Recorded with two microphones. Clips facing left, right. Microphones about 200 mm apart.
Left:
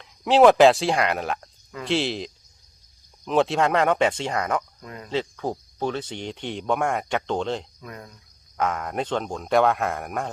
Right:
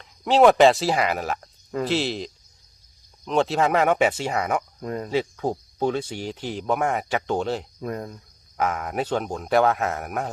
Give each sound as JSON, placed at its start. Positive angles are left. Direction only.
{"t": 0.0, "sound": "speech", "side_deg": 0}
{"t": 4.8, "sound": "speech", "side_deg": -45}
{"t": 5.1, "sound": "speech", "side_deg": -10}
{"t": 7.8, "sound": "speech", "side_deg": -40}
{"t": 8.5, "sound": "speech", "side_deg": -5}